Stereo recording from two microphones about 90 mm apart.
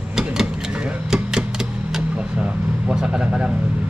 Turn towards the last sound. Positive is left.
turn(degrees=-10)  # may be behind; listen again after turning